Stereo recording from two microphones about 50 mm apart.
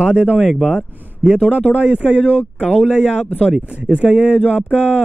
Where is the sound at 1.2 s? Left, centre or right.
Centre.